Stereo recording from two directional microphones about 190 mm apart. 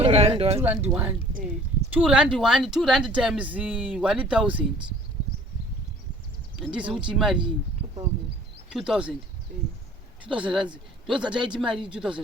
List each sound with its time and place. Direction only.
0.0 s speech: 35° right (ahead or behind)
0.6 s speech: 10° right (ahead or behind)
1.3 s speech: 45° right (ahead or behind)
1.9 s speech: 5° right (ahead or behind)
6.7 s speech: 5° right (ahead or behind)
8.7 s speech: 5° right (ahead or behind)
10.2 s speech: 5° right (ahead or behind)